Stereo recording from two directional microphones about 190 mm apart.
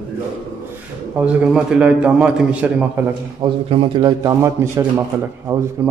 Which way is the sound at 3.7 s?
25° right (ahead or behind).